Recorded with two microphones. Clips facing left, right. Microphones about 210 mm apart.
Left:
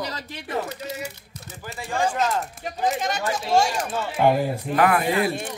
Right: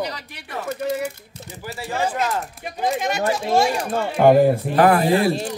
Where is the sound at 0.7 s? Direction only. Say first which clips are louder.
Right 9 dB; 55° right (ahead or behind).